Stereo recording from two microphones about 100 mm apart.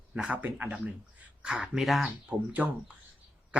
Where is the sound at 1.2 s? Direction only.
10° right (ahead or behind).